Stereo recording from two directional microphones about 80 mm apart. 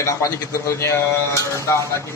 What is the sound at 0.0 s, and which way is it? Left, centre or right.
Speech, left.